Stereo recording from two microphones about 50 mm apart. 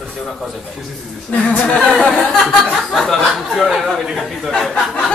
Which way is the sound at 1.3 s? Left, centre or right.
Left.